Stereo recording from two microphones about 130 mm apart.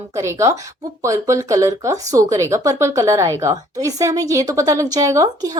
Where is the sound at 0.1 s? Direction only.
25° right (ahead or behind).